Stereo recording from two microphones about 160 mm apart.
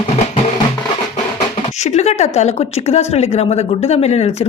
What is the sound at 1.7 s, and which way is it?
A woman's voice, 45° left (ahead or behind).